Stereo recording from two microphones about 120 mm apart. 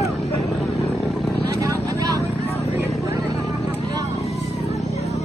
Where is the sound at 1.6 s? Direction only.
30° right (ahead or behind).